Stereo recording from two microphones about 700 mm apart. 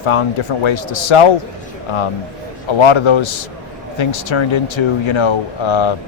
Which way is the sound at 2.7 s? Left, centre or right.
Left.